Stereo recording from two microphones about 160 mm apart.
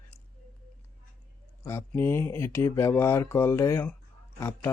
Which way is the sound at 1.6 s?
15° left (ahead or behind).